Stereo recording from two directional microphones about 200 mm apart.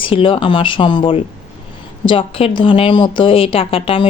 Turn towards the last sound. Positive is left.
turn(degrees=25)  # may be behind; listen again after turning